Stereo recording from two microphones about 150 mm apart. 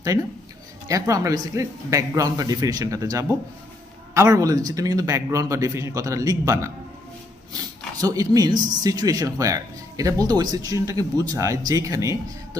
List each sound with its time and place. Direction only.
0.9 s a man's voice: 20° right (ahead or behind)
8.0 s a man's voice: 25° right (ahead or behind)